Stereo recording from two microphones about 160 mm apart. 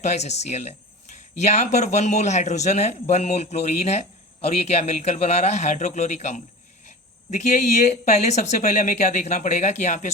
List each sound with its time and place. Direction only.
0.0 s speech: 45° left (ahead or behind)